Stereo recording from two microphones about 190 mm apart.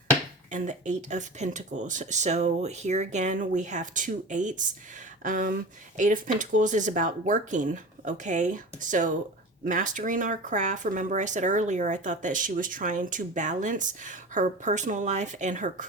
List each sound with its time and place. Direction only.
0.5 s speech: 40° right (ahead or behind)